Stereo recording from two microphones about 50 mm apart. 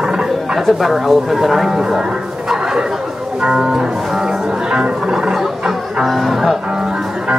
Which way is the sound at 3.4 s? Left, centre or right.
Centre.